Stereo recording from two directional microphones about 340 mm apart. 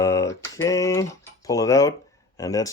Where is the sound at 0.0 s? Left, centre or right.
Centre.